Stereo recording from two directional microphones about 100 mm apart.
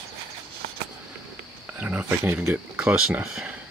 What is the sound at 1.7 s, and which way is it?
Speech, 15° right (ahead or behind).